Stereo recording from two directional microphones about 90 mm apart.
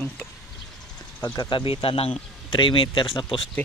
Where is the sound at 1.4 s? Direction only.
70° left (ahead or behind).